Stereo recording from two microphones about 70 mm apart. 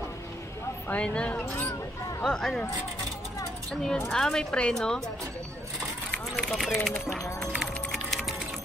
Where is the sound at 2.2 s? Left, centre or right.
Centre.